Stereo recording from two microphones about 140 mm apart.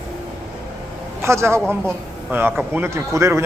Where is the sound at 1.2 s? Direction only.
20° right (ahead or behind).